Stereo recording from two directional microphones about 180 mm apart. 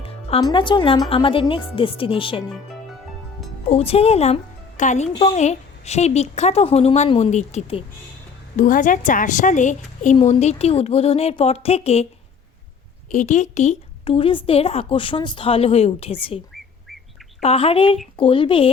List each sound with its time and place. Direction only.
0.0 s music: 35° left (ahead or behind)
0.4 s a woman's voice: 25° left (ahead or behind)
3.7 s a woman's voice: 35° left (ahead or behind)
8.5 s a woman's voice: 45° left (ahead or behind)
13.1 s a woman's voice: 45° left (ahead or behind)
14.0 s a woman's voice: 30° left (ahead or behind)
17.4 s a woman's voice: 35° left (ahead or behind)